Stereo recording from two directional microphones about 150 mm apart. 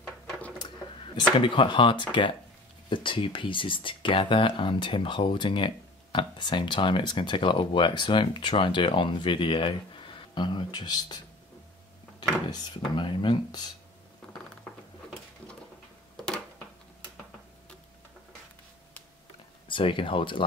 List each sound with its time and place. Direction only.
1.4 s speech: 35° left (ahead or behind)
12.4 s speech: 30° left (ahead or behind)
19.7 s speech: 35° left (ahead or behind)